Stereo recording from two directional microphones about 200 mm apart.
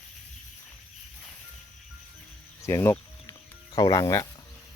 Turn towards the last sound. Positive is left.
turn(degrees=15)  # may be behind; listen again after turning